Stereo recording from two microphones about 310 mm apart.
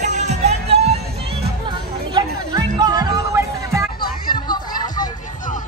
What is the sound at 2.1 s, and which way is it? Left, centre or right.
Music, centre.